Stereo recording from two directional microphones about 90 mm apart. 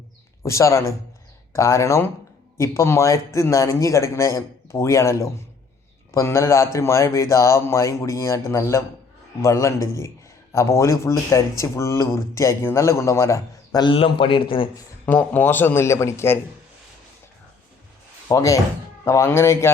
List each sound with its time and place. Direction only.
0.4 s speech: 35° left (ahead or behind)
13.7 s a man's voice: 75° left (ahead or behind)
15.0 s a man's voice: 20° left (ahead or behind)
18.3 s speech: 35° left (ahead or behind)